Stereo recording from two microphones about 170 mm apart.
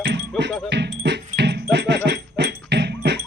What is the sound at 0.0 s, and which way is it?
Music, 90° right.